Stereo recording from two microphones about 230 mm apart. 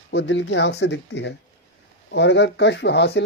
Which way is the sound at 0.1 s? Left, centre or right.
Left.